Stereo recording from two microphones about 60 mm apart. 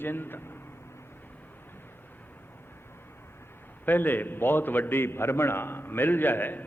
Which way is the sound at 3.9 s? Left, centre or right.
Left.